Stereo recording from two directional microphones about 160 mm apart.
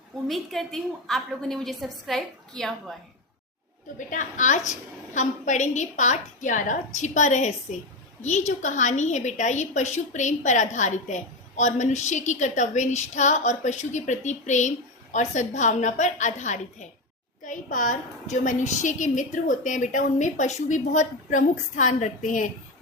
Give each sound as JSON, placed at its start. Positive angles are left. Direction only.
{"t": 0.3, "sound": "a woman's voice", "side_deg": 0}
{"t": 3.9, "sound": "a woman's voice", "side_deg": 50}